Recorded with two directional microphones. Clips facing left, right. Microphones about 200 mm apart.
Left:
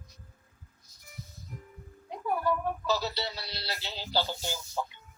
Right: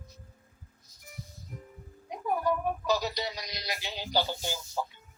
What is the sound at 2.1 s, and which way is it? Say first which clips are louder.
Speech: right 1 dB; 15° right (ahead or behind).